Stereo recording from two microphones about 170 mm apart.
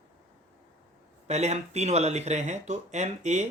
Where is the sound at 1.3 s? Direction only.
40° right (ahead or behind).